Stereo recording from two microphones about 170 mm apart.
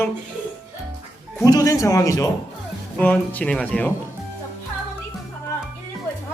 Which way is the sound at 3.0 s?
10° left (ahead or behind).